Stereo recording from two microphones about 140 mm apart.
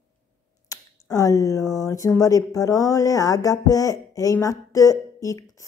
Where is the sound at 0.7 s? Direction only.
25° left (ahead or behind).